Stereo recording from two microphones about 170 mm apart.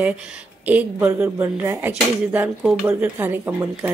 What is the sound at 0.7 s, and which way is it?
Speech, 10° right (ahead or behind).